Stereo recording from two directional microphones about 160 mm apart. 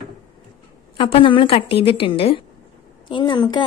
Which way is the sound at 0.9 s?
35° left (ahead or behind).